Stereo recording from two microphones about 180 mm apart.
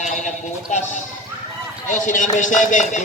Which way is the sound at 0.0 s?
45° left (ahead or behind).